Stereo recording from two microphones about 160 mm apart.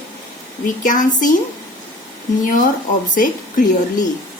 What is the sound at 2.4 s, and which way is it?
Speech, 55° left (ahead or behind).